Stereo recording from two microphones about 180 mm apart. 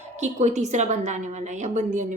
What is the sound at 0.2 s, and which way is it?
A woman's voice, 40° right (ahead or behind).